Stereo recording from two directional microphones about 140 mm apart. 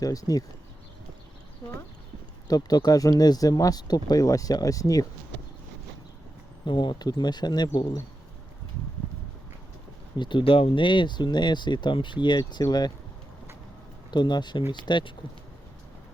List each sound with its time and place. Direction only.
0.0 s speech: 25° left (ahead or behind)
1.6 s speech: 10° left (ahead or behind)
2.5 s speech: 30° left (ahead or behind)
6.7 s speech: 35° left (ahead or behind)
10.2 s speech: 35° left (ahead or behind)
14.1 s speech: 30° left (ahead or behind)